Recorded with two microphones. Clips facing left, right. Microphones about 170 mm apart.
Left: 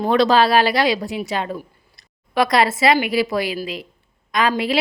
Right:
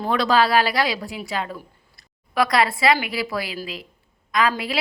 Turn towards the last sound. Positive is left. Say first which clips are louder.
# left 3 dB
turn(degrees=25)  # may be behind; listen again after turning